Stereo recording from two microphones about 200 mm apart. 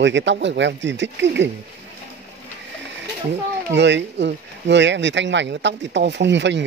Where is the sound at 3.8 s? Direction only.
60° right (ahead or behind).